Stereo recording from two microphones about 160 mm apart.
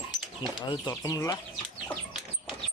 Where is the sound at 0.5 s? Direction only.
25° left (ahead or behind).